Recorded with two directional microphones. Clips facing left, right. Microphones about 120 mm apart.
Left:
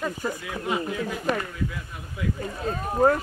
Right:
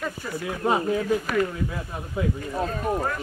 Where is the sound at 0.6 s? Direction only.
40° right (ahead or behind).